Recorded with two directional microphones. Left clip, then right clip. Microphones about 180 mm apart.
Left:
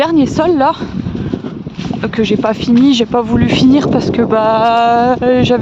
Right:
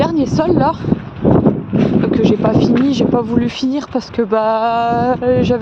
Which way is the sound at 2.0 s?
35° left (ahead or behind).